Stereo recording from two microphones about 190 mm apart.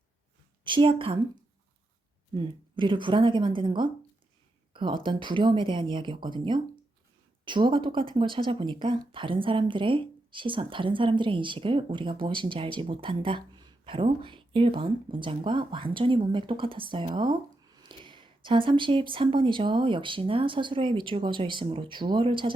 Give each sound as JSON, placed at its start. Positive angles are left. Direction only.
{"t": 0.6, "sound": "a woman's voice", "side_deg": -25}
{"t": 2.3, "sound": "speech", "side_deg": -25}